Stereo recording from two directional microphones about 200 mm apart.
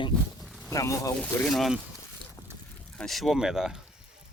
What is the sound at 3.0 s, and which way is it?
Speech, centre (ahead or behind).